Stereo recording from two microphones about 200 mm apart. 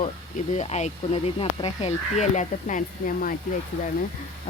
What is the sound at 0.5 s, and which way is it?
Speech, 35° left (ahead or behind).